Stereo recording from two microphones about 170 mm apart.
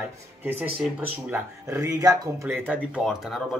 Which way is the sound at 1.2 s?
15° right (ahead or behind).